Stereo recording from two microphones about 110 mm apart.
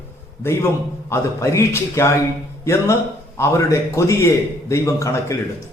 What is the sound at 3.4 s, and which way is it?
A man's voice, 30° left (ahead or behind).